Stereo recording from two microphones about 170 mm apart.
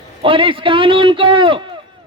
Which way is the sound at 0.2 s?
30° right (ahead or behind).